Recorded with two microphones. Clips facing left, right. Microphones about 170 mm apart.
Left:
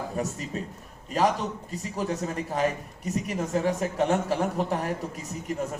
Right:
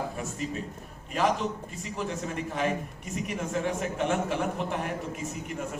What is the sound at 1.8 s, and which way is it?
A man's voice, 40° left (ahead or behind).